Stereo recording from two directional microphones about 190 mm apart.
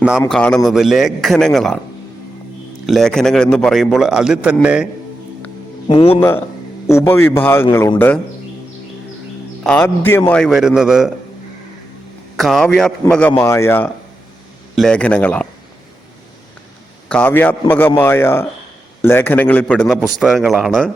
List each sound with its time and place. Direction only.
0.3 s a man's voice: 5° left (ahead or behind)
2.8 s a man's voice: centre (ahead or behind)
5.9 s speech: 30° left (ahead or behind)
6.1 s a man's voice: 10° left (ahead or behind)
9.6 s a man's voice: 10° left (ahead or behind)
12.4 s a man's voice: centre (ahead or behind)
17.1 s a man's voice: 10° left (ahead or behind)